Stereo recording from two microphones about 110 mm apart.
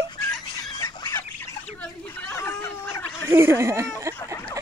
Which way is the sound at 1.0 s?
25° left (ahead or behind).